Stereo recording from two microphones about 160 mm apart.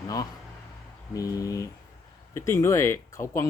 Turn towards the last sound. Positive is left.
turn(degrees=20)  # may be behind; listen again after turning